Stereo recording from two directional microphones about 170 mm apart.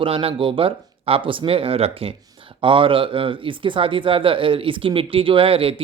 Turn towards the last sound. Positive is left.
turn(degrees=-35)  # may be behind; listen again after turning